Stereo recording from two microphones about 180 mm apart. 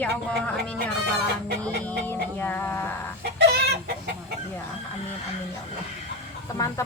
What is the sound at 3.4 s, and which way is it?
Chicken, 65° right (ahead or behind).